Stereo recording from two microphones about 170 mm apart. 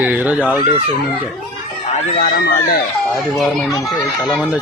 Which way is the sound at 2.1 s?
65° left (ahead or behind).